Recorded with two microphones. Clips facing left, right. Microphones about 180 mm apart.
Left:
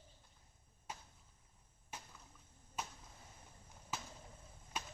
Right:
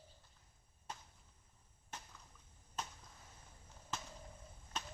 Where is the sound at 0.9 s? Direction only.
10° left (ahead or behind).